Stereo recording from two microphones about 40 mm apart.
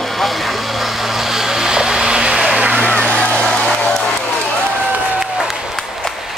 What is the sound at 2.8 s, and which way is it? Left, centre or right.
Vehicle, left.